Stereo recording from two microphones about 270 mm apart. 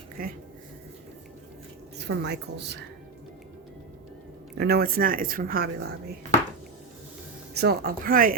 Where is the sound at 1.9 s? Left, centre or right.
Right.